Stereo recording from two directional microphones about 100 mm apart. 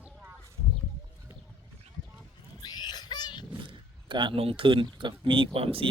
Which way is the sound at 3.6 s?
50° right (ahead or behind).